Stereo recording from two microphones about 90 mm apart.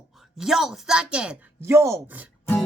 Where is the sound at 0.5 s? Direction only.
5° right (ahead or behind).